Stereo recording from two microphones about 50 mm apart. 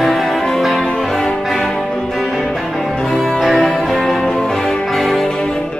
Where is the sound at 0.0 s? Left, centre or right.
Centre.